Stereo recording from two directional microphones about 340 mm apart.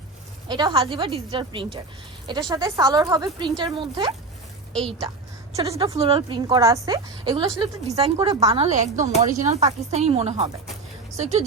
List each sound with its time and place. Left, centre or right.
0.4 s a woman's voice: centre
4.7 s a woman's voice: centre
5.5 s a woman's voice: centre